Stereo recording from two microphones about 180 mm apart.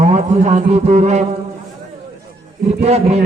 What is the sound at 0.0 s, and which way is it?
A man's voice, 40° right (ahead or behind).